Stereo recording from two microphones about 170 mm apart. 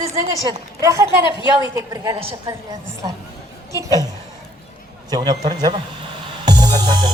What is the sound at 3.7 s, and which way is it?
Speech, 20° right (ahead or behind).